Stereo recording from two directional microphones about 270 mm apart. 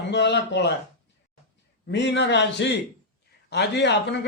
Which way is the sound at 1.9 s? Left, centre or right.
Left.